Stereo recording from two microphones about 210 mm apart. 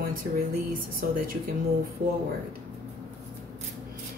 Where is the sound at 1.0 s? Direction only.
40° right (ahead or behind).